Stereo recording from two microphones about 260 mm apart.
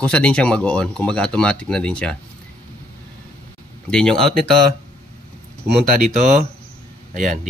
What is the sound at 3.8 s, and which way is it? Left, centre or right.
Speech, centre.